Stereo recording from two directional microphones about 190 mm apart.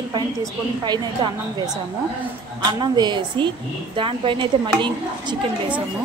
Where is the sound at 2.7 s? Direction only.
25° right (ahead or behind).